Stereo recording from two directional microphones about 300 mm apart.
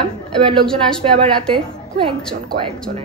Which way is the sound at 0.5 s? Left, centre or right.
Centre.